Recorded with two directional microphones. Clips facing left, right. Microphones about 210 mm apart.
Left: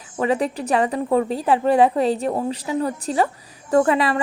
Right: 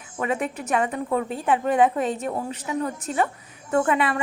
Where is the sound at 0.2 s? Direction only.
35° left (ahead or behind).